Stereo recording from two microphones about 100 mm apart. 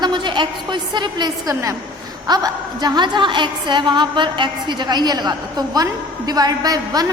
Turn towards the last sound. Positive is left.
turn(degrees=-40)  # may be behind; listen again after turning